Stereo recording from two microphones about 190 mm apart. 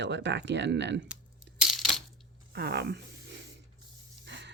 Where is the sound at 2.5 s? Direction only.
60° right (ahead or behind).